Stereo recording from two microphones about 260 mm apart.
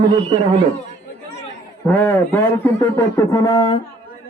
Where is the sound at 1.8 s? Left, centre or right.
Centre.